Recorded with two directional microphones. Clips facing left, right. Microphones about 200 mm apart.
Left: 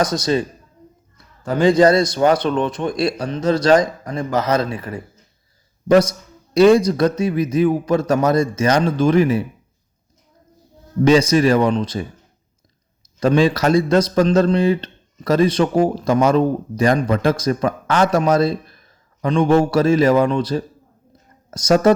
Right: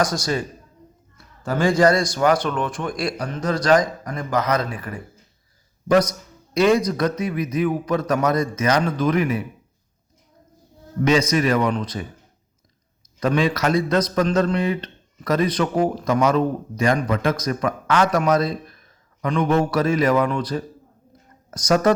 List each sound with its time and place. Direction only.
0.0 s speech: 25° left (ahead or behind)
1.6 s speech: 20° left (ahead or behind)
11.0 s speech: 30° left (ahead or behind)
13.1 s speech: 30° left (ahead or behind)